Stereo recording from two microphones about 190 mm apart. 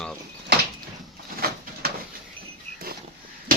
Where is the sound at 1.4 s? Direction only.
50° right (ahead or behind).